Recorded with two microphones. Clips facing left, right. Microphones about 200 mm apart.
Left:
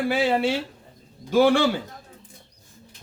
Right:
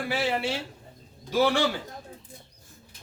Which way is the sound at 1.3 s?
50° left (ahead or behind).